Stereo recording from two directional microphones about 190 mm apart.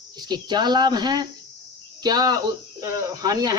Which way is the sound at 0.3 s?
25° right (ahead or behind).